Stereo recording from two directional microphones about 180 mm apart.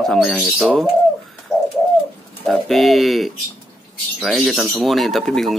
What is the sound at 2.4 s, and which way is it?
Speech, centre (ahead or behind).